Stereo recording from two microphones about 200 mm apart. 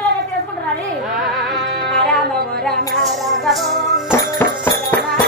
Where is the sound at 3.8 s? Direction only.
Centre (ahead or behind).